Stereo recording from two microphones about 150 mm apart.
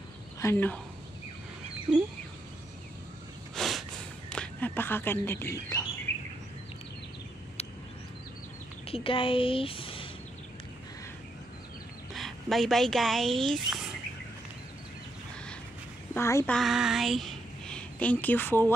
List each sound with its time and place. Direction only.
0.4 s speech: 15° left (ahead or behind)
3.5 s a sound: centre (ahead or behind)
4.3 s bird: 10° left (ahead or behind)
8.8 s a woman's voice: 40° left (ahead or behind)
12.1 s speech: centre (ahead or behind)
16.2 s speech: 20° left (ahead or behind)
16.4 s speech: centre (ahead or behind)